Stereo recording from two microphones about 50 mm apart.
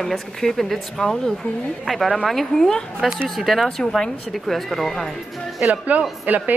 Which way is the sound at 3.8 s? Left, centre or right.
Centre.